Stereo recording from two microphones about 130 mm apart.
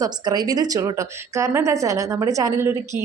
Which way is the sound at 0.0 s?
30° right (ahead or behind).